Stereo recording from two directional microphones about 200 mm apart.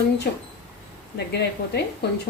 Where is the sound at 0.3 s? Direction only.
55° left (ahead or behind).